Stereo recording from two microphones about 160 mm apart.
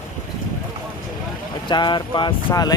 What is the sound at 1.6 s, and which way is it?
Speech, 30° left (ahead or behind).